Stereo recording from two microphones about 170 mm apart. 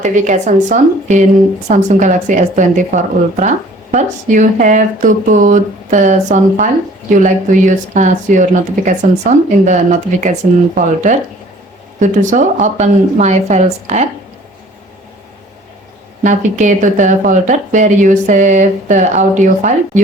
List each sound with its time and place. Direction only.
0.0 s speech: 45° right (ahead or behind)
16.2 s speech: 45° right (ahead or behind)